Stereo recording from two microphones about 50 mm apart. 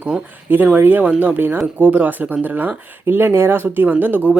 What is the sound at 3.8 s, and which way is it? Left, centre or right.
Speech, right.